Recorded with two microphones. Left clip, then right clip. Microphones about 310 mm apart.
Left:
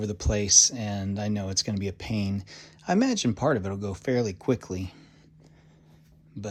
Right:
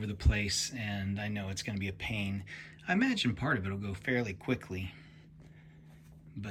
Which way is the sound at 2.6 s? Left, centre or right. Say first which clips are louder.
Left 6 dB; centre.